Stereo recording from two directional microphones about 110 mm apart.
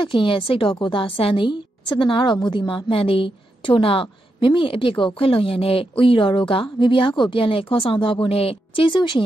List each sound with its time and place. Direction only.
0.0 s a woman's voice: 50° left (ahead or behind)